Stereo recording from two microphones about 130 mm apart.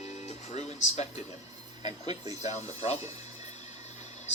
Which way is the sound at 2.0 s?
30° right (ahead or behind).